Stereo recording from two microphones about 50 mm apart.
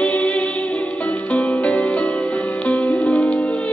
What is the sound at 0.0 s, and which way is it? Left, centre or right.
Music, left.